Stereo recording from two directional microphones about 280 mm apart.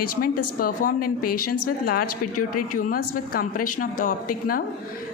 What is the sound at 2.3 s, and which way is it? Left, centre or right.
Speech, left.